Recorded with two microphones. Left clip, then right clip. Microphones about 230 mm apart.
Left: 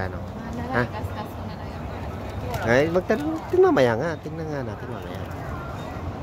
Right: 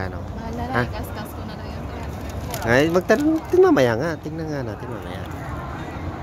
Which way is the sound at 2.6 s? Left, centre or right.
Centre.